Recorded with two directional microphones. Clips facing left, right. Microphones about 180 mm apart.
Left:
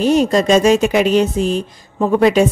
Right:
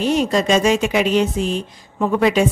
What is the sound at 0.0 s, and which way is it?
Speech, 40° left (ahead or behind).